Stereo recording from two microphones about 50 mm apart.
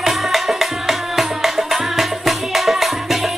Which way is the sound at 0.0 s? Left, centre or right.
Centre.